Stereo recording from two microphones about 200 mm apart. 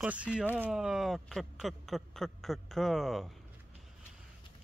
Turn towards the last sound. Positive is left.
turn(degrees=0)  # may be behind; listen again after turning